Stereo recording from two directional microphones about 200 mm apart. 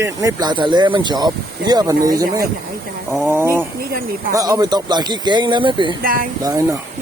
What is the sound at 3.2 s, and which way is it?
Speech, 10° right (ahead or behind).